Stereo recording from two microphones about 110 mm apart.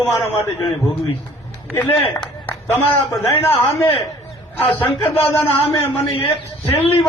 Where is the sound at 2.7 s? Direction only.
20° left (ahead or behind).